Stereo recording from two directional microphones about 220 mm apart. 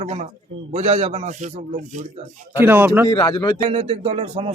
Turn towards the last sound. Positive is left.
turn(degrees=-25)  # may be behind; listen again after turning